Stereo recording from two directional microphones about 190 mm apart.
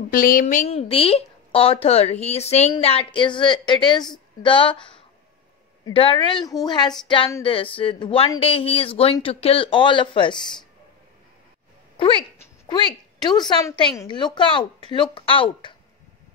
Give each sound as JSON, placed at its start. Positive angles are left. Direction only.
{"t": 0.1, "sound": "a woman's voice", "side_deg": 45}
{"t": 12.6, "sound": "a woman's voice", "side_deg": 25}